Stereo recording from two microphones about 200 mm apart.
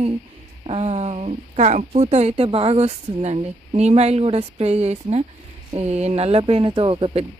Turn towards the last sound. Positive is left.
turn(degrees=-25)  # may be behind; listen again after turning